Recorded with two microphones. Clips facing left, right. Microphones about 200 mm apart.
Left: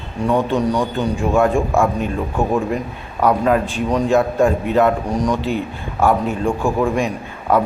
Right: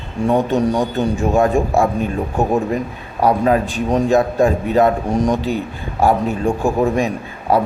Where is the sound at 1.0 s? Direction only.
40° right (ahead or behind).